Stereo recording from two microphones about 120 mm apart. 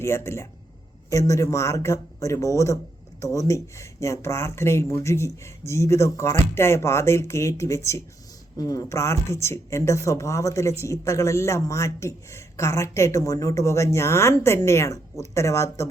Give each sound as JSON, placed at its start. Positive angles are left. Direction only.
{"t": 0.0, "sound": "speech", "side_deg": 20}